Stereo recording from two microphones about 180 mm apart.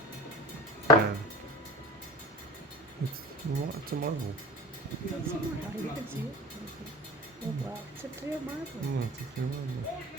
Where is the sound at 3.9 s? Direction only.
60° right (ahead or behind).